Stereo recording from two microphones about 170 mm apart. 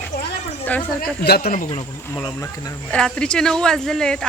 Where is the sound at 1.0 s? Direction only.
65° left (ahead or behind).